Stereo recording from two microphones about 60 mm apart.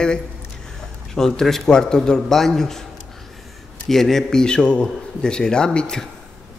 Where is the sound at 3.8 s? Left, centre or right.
Centre.